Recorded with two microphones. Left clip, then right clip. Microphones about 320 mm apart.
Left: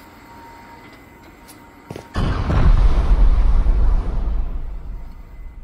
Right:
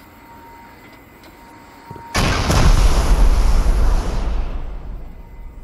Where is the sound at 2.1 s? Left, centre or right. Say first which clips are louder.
Right 7 dB; right.